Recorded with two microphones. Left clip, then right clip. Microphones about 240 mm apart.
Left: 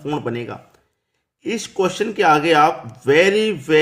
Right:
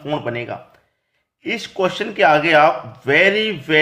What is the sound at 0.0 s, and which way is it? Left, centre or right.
Speech, centre.